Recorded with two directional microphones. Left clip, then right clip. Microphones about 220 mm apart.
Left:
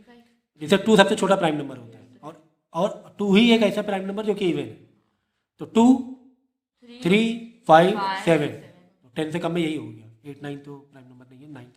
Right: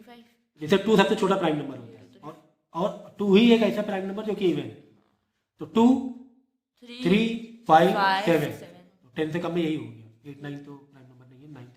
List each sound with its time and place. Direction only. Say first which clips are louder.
0.6 s a man's voice: left 4 dB; 50° left (ahead or behind)
7.0 s a man's voice: left 3 dB; 50° left (ahead or behind)
7.9 s speech: right 3 dB; 45° right (ahead or behind)
9.1 s a man's voice: left 2 dB; 50° left (ahead or behind)